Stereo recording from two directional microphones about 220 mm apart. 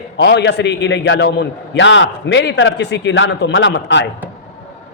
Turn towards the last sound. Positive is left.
turn(degrees=55)  # may be behind; listen again after turning